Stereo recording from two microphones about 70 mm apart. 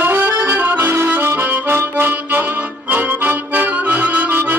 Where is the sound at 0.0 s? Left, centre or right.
Right.